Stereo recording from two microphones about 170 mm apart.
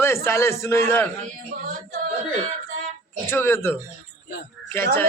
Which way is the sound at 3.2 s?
15° left (ahead or behind).